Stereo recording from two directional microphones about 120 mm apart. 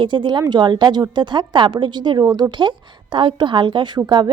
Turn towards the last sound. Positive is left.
turn(degrees=-40)  # may be behind; listen again after turning